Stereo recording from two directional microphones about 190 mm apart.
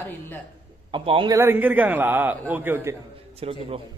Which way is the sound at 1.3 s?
10° right (ahead or behind).